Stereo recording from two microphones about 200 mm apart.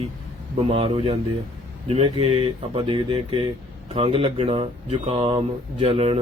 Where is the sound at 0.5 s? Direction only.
30° right (ahead or behind).